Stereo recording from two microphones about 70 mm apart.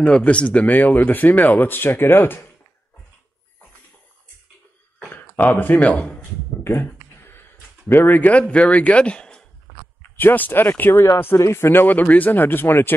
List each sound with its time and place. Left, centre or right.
0.0 s speech: centre; by 2.4 s left
5.1 s speech: left
7.9 s speech: left
10.1 s speech: left
11.3 s speech: left